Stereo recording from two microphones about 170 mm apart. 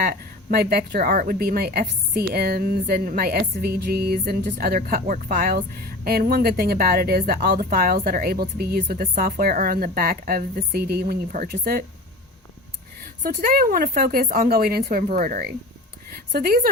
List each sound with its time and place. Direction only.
0.0 s speech: 60° right (ahead or behind)
13.2 s a woman's voice: 60° right (ahead or behind)